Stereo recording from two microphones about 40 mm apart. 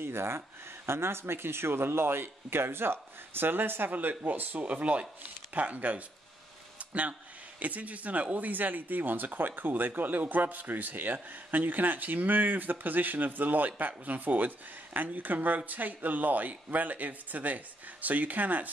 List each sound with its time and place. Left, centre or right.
0.0 s speech: right
3.9 s speech: right
4.6 s speech: right
6.8 s a sound: right
7.6 s speech: right